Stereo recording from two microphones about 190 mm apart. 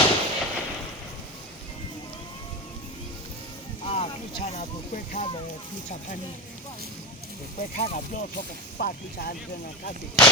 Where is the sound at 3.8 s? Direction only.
30° left (ahead or behind).